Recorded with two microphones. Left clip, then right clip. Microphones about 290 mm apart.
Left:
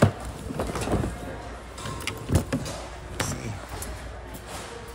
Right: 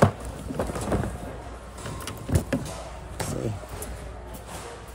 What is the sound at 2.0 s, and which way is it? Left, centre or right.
Vehicle, centre.